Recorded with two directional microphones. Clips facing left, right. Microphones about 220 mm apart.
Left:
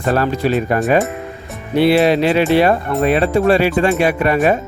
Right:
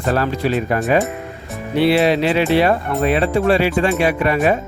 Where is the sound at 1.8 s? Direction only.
45° left (ahead or behind).